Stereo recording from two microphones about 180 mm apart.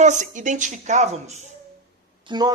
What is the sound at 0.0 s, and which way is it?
A woman's voice, 40° right (ahead or behind).